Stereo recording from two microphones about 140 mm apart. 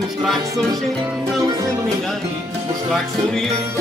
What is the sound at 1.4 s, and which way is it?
Music, 25° right (ahead or behind).